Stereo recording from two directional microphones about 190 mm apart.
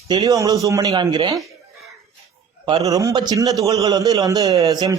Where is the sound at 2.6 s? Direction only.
15° right (ahead or behind).